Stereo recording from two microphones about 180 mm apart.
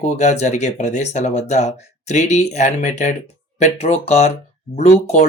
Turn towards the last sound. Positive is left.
turn(degrees=35)  # may be behind; listen again after turning